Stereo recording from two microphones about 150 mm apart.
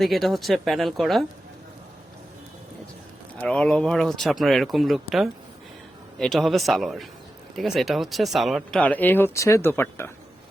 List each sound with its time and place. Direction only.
0.0 s speech: centre (ahead or behind)
3.3 s speech: 5° left (ahead or behind)
8.8 s speech: 10° left (ahead or behind)